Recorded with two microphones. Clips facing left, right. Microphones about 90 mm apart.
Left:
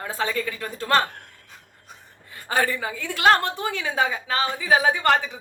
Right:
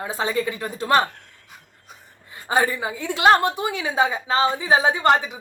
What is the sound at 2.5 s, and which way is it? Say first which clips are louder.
A woman's voice: right 3 dB; 20° right (ahead or behind).